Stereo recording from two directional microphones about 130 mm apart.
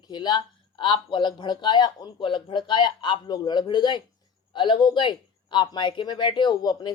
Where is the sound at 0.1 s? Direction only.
35° left (ahead or behind).